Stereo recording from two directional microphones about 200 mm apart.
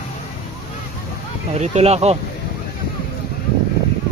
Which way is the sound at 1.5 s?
35° right (ahead or behind).